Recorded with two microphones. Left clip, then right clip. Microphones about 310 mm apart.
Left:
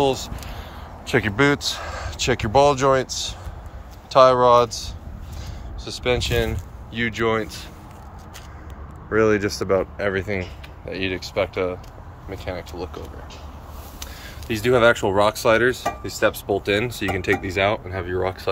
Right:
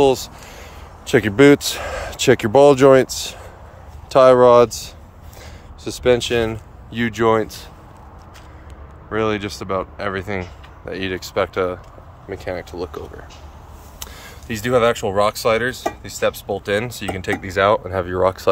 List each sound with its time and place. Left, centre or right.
0.0 s speech: right
5.9 s speech: right
9.1 s speech: centre; by 18.5 s right